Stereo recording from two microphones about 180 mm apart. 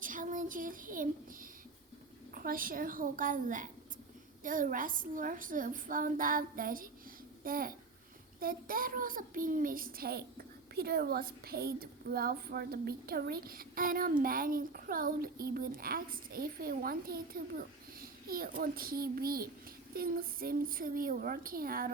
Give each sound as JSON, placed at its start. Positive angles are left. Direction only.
{"t": 0.0, "sound": "child singing", "side_deg": -50}
{"t": 2.3, "sound": "a child's voice", "side_deg": -55}